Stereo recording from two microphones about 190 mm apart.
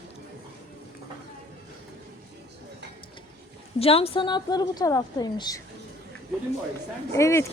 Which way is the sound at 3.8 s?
30° left (ahead or behind).